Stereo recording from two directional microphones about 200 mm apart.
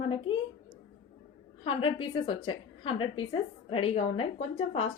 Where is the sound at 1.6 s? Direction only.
25° left (ahead or behind).